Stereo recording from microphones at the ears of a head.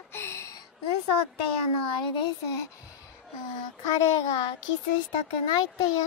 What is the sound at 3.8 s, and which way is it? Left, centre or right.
A child's voice, left.